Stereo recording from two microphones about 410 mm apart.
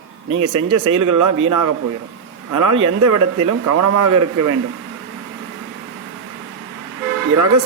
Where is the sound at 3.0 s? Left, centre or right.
Right.